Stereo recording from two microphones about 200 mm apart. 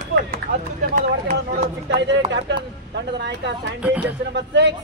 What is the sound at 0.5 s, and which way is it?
Run, 45° right (ahead or behind).